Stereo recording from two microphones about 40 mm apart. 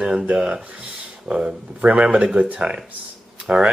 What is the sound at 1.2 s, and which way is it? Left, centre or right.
Speech, right.